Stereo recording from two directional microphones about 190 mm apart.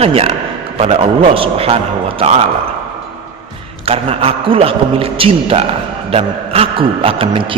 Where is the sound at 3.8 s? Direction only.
30° right (ahead or behind).